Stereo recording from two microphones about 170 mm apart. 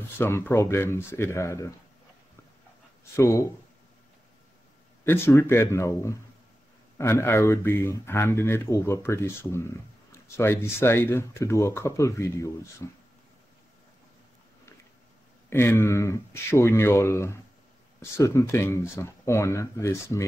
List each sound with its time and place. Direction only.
0.2 s speech: 15° left (ahead or behind)
3.2 s speech: 20° left (ahead or behind)
5.0 s speech: 15° left (ahead or behind)
15.5 s speech: 15° left (ahead or behind)